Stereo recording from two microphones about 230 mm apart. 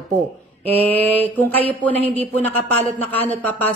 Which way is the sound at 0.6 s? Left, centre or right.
Right.